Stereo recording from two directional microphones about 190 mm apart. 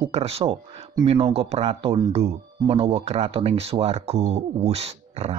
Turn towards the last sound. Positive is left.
turn(degrees=-35)  # may be behind; listen again after turning